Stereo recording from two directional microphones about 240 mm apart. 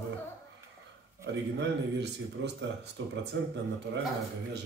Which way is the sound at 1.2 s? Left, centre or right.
Right.